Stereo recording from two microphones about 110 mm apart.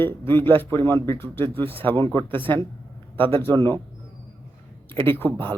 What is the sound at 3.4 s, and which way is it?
Speech, 20° left (ahead or behind).